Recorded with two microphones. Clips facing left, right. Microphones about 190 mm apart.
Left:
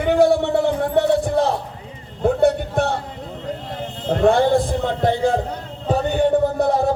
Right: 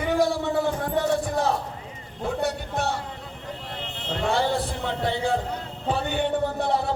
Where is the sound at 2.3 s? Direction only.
55° left (ahead or behind).